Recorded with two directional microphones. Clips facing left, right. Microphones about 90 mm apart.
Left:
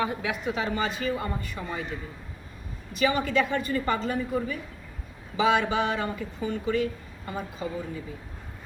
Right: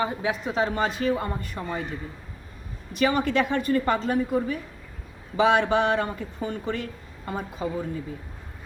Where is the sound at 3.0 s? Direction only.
45° right (ahead or behind).